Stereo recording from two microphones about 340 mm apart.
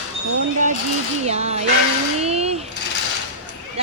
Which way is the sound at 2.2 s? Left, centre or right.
Centre.